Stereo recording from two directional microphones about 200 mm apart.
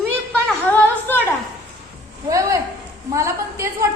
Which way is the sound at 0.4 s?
10° left (ahead or behind).